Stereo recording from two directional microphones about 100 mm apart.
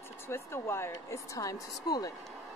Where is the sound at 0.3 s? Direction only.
25° left (ahead or behind).